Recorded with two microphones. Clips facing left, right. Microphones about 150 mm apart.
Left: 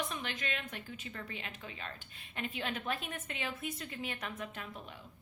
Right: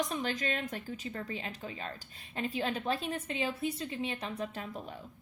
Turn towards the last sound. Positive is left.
turn(degrees=-35)  # may be behind; listen again after turning